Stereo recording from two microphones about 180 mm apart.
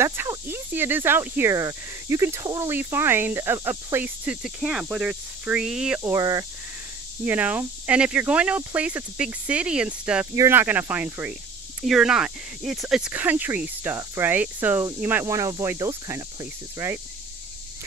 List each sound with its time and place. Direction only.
0.0 s speech: 15° right (ahead or behind)
5.9 s speech: 15° right (ahead or behind)